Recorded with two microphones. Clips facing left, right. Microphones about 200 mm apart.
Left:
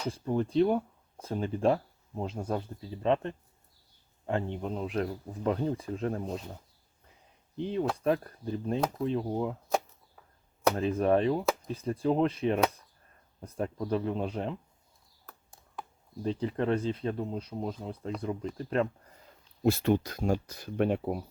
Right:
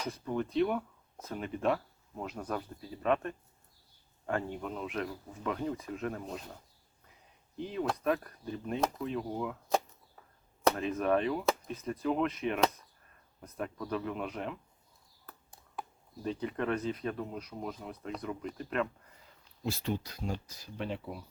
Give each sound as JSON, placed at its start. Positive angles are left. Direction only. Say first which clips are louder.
{"t": 0.0, "sound": "speech", "louder": "left 4 dB", "side_deg": 30}
{"t": 7.5, "sound": "speech", "louder": "left 4 dB", "side_deg": 30}
{"t": 10.8, "sound": "speech", "louder": "left 4 dB", "side_deg": 30}
{"t": 16.2, "sound": "speech", "louder": "left 4 dB", "side_deg": 30}
{"t": 19.6, "sound": "speech", "louder": "left 9 dB", "side_deg": 55}